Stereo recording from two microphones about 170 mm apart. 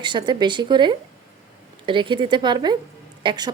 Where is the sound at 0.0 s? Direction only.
25° right (ahead or behind).